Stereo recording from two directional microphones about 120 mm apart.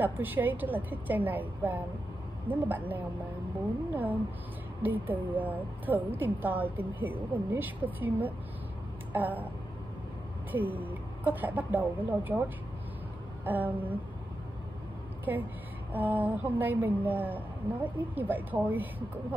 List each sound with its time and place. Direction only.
0.0 s speech: 15° right (ahead or behind)
10.5 s speech: 15° right (ahead or behind)
13.5 s speech: 15° right (ahead or behind)
15.3 s speech: 15° right (ahead or behind)